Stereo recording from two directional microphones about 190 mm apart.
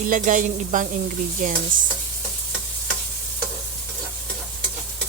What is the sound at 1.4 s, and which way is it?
Speech, 45° right (ahead or behind).